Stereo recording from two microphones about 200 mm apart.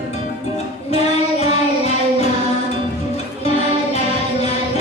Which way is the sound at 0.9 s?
30° left (ahead or behind).